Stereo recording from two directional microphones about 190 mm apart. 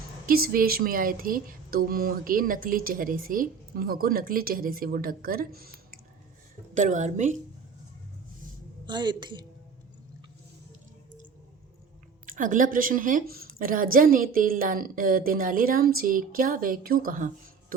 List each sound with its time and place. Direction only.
0.3 s speech: 50° right (ahead or behind)
6.7 s a woman's voice: 40° right (ahead or behind)
8.9 s a woman's voice: 25° right (ahead or behind)
12.2 s speech: 45° right (ahead or behind)